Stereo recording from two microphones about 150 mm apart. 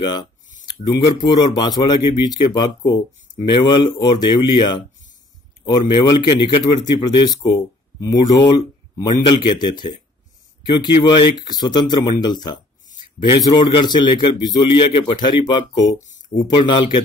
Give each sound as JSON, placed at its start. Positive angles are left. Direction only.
{"t": 0.0, "sound": "a man's voice", "side_deg": 30}
{"t": 0.5, "sound": "a sound", "side_deg": 55}
{"t": 0.8, "sound": "a man's voice", "side_deg": 30}
{"t": 11.1, "sound": "a man's voice", "side_deg": 30}